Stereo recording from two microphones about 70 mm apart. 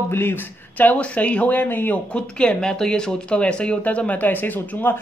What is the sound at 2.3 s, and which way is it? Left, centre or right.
Speech, centre.